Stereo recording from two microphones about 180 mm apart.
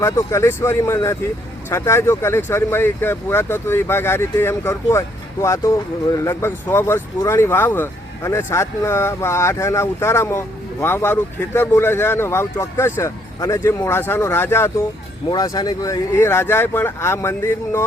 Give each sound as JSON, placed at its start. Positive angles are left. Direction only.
{"t": 0.0, "sound": "speech", "side_deg": 15}